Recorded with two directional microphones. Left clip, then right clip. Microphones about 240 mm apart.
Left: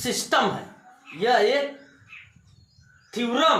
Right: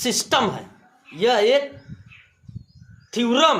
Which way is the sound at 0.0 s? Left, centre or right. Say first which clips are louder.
Right 2 dB; right.